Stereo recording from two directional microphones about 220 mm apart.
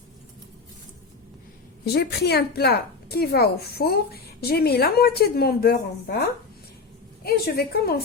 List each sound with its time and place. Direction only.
1.8 s a woman's voice: 45° left (ahead or behind)
7.3 s a woman's voice: 45° left (ahead or behind)